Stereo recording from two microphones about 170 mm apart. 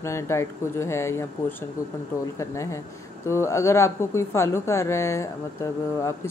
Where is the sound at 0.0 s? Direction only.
15° left (ahead or behind).